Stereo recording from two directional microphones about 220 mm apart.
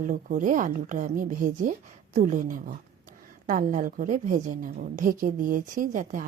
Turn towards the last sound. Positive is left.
turn(degrees=-35)  # may be behind; listen again after turning